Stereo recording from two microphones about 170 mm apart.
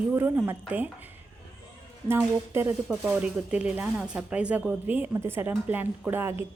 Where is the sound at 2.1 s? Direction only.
15° right (ahead or behind).